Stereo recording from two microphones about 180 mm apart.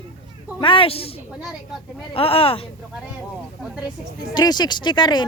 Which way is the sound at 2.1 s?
30° left (ahead or behind).